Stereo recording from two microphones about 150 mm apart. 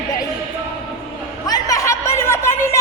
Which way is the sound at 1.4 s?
25° left (ahead or behind).